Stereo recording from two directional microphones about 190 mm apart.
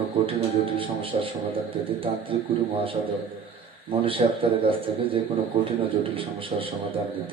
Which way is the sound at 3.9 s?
30° right (ahead or behind).